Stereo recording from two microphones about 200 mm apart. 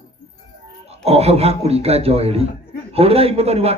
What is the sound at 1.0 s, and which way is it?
A man's voice, 30° right (ahead or behind).